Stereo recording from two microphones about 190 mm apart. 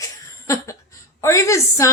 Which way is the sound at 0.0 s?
15° left (ahead or behind).